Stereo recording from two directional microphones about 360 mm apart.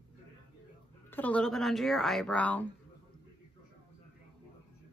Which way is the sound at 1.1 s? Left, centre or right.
Centre.